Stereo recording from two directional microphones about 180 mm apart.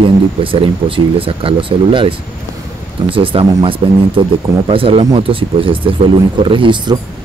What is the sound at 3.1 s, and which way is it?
Speech, 30° right (ahead or behind).